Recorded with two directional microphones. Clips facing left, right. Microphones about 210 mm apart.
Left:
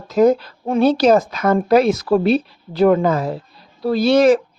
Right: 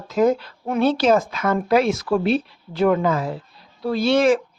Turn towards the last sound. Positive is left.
turn(degrees=40)  # may be behind; listen again after turning